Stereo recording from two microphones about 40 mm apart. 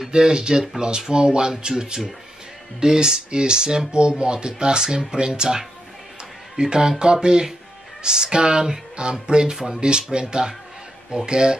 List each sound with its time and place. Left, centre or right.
0.1 s speech: right